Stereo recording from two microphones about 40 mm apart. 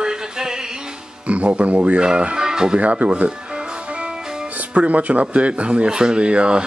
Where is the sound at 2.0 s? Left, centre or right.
Right.